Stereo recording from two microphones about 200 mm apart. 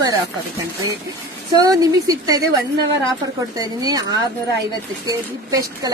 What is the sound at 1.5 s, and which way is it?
Speech, 20° right (ahead or behind).